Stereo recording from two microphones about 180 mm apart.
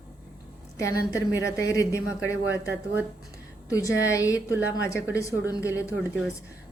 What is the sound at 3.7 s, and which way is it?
A woman's voice, 20° left (ahead or behind).